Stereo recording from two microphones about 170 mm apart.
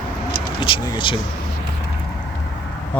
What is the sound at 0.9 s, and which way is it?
Speech, 30° left (ahead or behind).